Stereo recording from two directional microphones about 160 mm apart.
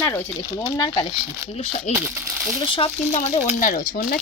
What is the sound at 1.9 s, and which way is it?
Crumpling, 5° right (ahead or behind).